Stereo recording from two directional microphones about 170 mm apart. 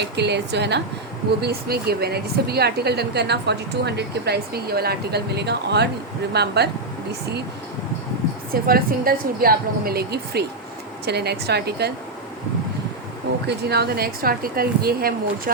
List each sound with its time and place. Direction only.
0.0 s a woman's voice: 80° right
1.4 s speech: 70° right (ahead or behind)
8.6 s a woman's voice: 60° right (ahead or behind)
13.5 s a woman's voice: 70° right (ahead or behind)